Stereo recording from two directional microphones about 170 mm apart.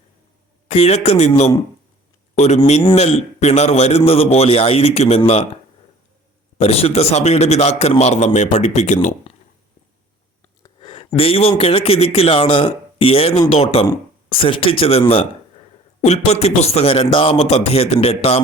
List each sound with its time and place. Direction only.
0.7 s a man's voice: 40° left (ahead or behind)
6.6 s a man's voice: 35° left (ahead or behind)
10.6 s a man's voice: 30° left (ahead or behind)